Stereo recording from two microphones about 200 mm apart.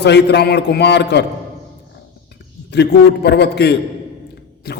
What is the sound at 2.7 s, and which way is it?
Mantra, 55° left (ahead or behind).